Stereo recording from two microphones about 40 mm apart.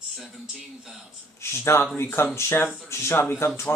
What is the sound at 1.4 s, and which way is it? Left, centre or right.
Speech, left.